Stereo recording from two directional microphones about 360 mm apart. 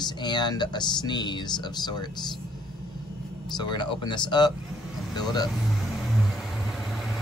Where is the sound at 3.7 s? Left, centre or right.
Centre.